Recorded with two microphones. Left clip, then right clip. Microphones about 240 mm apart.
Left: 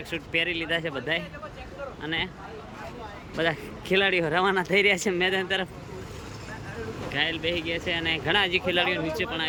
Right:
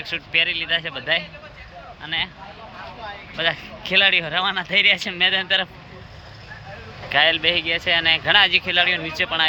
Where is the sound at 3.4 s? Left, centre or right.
Centre.